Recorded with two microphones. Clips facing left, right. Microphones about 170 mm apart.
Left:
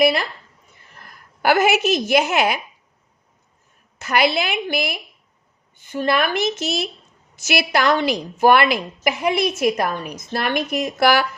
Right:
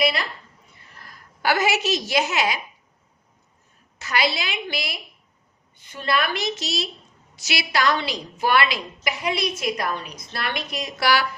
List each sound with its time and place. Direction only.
0.0 s a woman's voice: 50° left (ahead or behind)
3.9 s a woman's voice: 55° left (ahead or behind)